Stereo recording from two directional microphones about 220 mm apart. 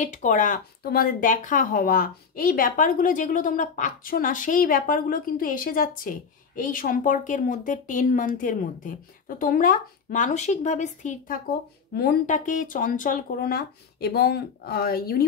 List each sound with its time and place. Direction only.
0.0 s speech: 35° left (ahead or behind)